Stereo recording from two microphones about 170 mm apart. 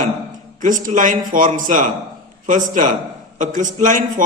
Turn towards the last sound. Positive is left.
turn(degrees=-50)  # may be behind; listen again after turning